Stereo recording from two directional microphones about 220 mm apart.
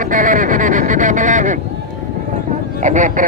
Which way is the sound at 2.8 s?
35° right (ahead or behind).